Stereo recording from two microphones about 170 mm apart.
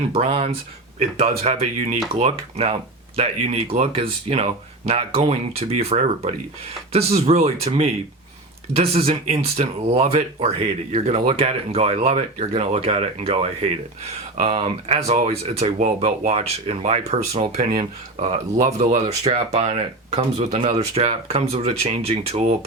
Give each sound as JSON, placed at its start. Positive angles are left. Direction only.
{"t": 0.1, "sound": "speech", "side_deg": -35}
{"t": 2.1, "sound": "speech", "side_deg": -35}
{"t": 18.5, "sound": "speech", "side_deg": -45}